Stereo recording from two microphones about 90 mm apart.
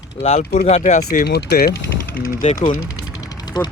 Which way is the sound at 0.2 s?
90° left.